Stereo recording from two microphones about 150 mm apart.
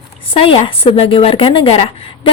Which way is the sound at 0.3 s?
35° left (ahead or behind).